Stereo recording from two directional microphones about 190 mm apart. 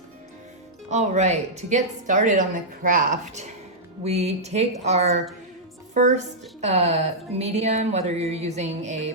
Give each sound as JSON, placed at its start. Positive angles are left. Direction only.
{"t": 0.9, "sound": "a woman's voice", "side_deg": -35}